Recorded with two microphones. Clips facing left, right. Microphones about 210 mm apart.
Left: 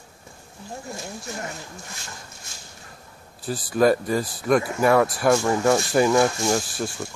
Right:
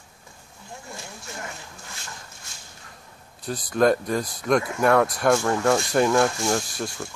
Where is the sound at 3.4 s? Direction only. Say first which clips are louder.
Left 1 dB; 5° left (ahead or behind).